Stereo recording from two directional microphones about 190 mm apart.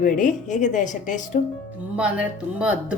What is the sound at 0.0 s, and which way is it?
A woman's voice, 45° left (ahead or behind).